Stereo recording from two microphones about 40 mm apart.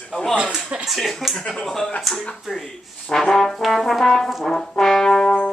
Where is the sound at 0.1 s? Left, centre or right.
Centre.